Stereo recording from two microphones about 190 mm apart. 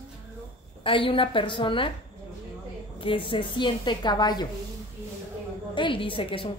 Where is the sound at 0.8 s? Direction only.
30° left (ahead or behind).